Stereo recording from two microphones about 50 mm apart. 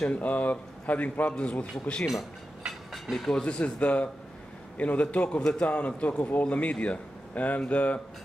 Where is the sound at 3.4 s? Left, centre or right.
Left.